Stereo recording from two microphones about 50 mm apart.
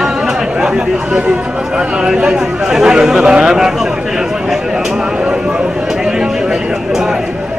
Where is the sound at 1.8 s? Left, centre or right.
Centre.